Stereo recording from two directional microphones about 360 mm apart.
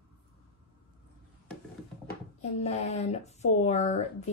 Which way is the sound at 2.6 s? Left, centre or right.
Centre.